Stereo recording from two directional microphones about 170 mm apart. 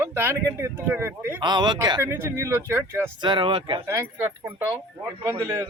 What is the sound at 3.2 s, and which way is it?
Speech, 30° right (ahead or behind).